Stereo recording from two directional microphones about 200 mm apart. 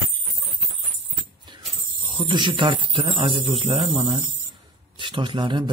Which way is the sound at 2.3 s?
25° right (ahead or behind).